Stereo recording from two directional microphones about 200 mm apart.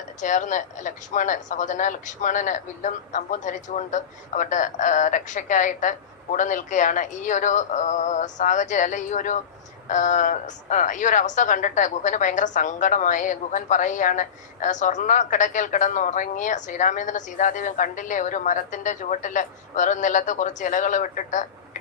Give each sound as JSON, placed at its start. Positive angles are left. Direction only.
{"t": 0.2, "sound": "a woman's voice", "side_deg": 40}